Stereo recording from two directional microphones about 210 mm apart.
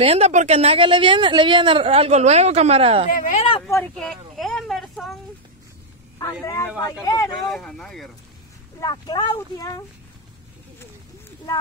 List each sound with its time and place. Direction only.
0.0 s speech: 30° right (ahead or behind)
3.1 s speech: 40° left (ahead or behind)
3.6 s speech: 10° left (ahead or behind)
3.9 s speech: centre (ahead or behind)
6.4 s speech: 15° left (ahead or behind)
7.5 s speech: centre (ahead or behind)
8.7 s speech: 20° left (ahead or behind)